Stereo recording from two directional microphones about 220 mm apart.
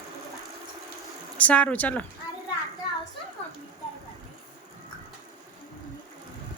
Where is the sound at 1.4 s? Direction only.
5° left (ahead or behind).